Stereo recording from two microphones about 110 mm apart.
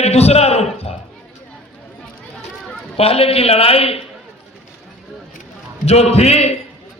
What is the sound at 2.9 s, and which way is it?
A man's voice, 65° left (ahead or behind).